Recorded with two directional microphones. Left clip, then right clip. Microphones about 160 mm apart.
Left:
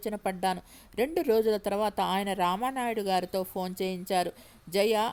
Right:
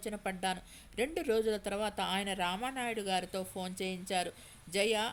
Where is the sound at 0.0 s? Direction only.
35° left (ahead or behind).